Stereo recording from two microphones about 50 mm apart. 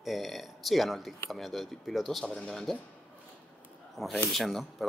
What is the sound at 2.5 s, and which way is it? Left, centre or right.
Speech, centre.